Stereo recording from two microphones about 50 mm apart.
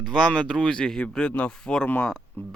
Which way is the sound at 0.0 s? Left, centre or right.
Centre.